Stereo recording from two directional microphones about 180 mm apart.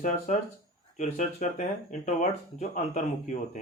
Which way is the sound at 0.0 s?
45° left (ahead or behind).